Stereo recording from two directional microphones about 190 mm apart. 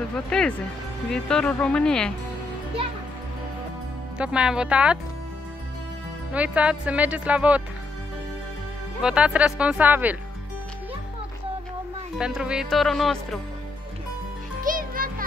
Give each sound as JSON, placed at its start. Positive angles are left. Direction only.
{"t": 0.1, "sound": "speech", "side_deg": 5}
{"t": 4.2, "sound": "speech", "side_deg": -5}
{"t": 6.3, "sound": "speech", "side_deg": -5}
{"t": 9.0, "sound": "speech", "side_deg": -5}
{"t": 12.2, "sound": "speech", "side_deg": -5}
{"t": 14.6, "sound": "music", "side_deg": -45}